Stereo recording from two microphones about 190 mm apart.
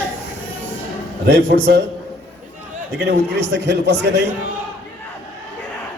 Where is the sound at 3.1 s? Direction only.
65° right (ahead or behind).